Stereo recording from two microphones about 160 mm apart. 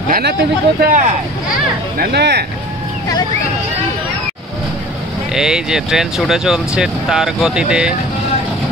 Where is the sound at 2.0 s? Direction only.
90° right.